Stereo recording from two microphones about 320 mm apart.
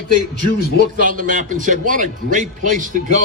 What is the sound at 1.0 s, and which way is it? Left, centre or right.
A man's voice, right.